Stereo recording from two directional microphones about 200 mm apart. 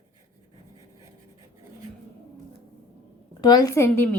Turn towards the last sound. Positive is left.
turn(degrees=10)  # may be behind; listen again after turning